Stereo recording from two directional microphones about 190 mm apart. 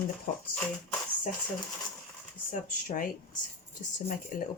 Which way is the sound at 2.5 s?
45° left (ahead or behind).